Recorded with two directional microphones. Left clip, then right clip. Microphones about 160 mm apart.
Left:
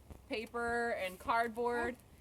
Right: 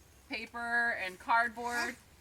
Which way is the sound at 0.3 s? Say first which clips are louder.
Right 3 dB; 15° left (ahead or behind).